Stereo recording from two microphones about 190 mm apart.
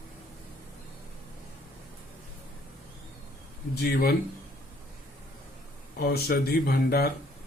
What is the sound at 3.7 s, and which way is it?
Speech, 55° left (ahead or behind).